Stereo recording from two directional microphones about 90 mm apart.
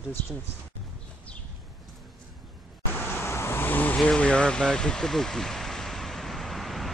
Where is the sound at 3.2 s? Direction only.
25° left (ahead or behind); by 6.9 s centre (ahead or behind).